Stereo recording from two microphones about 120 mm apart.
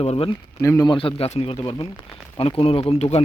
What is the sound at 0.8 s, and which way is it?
Speech, 45° left (ahead or behind).